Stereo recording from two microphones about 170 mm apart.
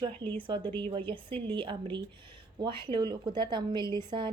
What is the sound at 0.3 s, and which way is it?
A woman's voice, 30° right (ahead or behind).